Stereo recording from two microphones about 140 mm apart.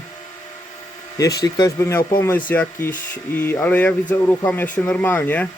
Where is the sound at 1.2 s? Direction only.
25° left (ahead or behind).